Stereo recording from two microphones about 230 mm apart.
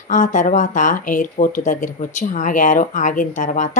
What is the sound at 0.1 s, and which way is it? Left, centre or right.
Speech, left.